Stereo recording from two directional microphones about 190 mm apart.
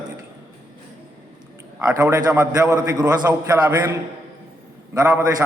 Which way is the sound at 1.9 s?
15° right (ahead or behind).